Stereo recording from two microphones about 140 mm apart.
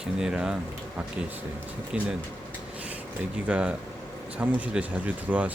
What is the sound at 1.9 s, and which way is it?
Speech, 5° right (ahead or behind).